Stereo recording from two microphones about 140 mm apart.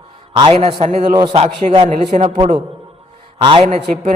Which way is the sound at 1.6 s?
55° right (ahead or behind).